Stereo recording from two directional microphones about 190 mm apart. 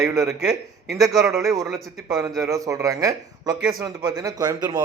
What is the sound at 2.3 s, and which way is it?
A man's voice, 15° right (ahead or behind).